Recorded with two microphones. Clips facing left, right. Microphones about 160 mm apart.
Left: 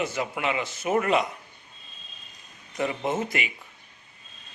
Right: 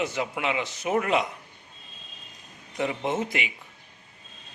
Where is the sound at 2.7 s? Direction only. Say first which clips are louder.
Even; centre (ahead or behind).